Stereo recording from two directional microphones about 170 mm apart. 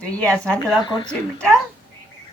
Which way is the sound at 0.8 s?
25° left (ahead or behind).